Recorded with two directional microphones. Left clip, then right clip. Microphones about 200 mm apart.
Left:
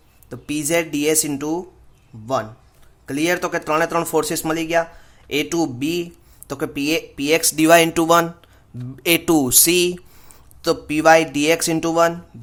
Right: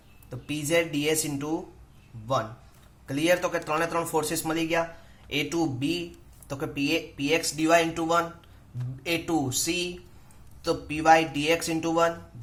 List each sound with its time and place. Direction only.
0.3 s speech: 50° left (ahead or behind)